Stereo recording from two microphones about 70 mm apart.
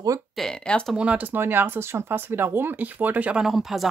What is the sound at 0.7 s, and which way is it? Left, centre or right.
Speech, centre.